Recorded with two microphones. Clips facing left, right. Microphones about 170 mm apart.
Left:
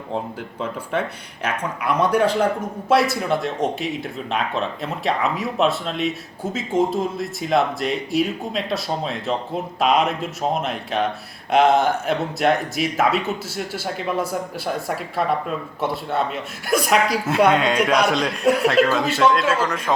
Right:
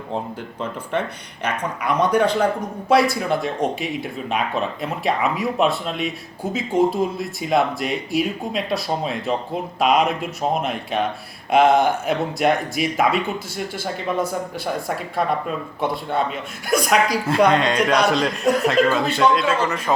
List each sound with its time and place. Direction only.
1.5 s speech: 5° left (ahead or behind)